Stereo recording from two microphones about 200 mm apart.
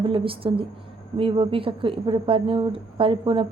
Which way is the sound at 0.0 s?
25° right (ahead or behind).